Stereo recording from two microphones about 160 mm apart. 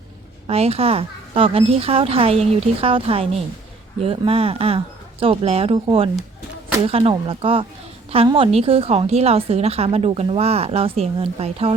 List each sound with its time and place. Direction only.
0.4 s a woman's voice: 40° right (ahead or behind)